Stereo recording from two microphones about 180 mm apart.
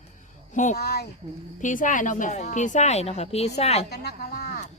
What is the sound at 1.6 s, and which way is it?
A woman's voice, 45° left (ahead or behind).